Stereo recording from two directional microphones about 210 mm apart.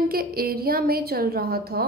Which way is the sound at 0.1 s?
45° right (ahead or behind).